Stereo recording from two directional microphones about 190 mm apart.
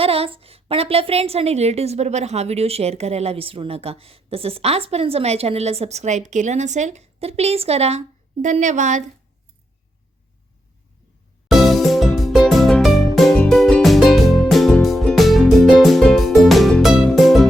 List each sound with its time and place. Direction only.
0.0 s a woman's voice: 30° right (ahead or behind)
11.4 s music: centre (ahead or behind)